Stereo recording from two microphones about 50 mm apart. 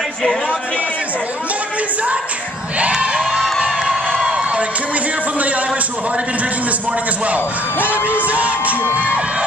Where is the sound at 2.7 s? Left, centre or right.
Right.